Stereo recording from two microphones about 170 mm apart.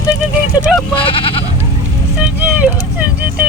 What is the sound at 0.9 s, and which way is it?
Goat, 30° left (ahead or behind).